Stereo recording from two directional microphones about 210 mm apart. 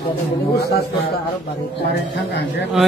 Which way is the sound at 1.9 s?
50° left (ahead or behind).